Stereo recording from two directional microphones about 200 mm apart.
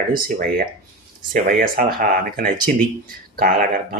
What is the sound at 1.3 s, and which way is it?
Speech, 45° right (ahead or behind).